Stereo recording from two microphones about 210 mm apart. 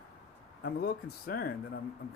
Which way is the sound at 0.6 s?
45° left (ahead or behind).